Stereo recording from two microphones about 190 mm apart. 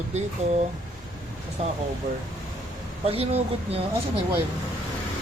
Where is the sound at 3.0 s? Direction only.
30° right (ahead or behind).